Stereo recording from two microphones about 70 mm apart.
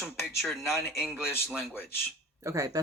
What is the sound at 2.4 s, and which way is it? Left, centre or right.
Speech, right.